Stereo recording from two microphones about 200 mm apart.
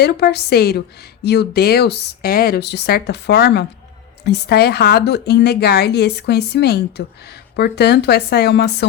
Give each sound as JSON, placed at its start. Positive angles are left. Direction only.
{"t": 0.0, "sound": "speech", "side_deg": 55}